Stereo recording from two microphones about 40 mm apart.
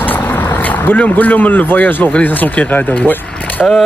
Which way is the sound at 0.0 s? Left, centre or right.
Left.